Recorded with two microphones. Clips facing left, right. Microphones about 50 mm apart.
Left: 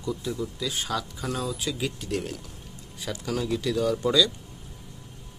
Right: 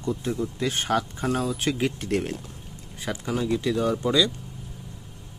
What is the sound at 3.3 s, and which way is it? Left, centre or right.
Speech, centre.